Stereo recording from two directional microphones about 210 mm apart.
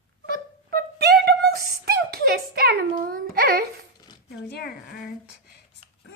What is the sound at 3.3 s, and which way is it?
Child singing, 45° right (ahead or behind).